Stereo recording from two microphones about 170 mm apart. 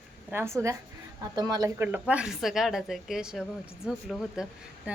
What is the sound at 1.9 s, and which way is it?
A woman's voice, 5° right (ahead or behind).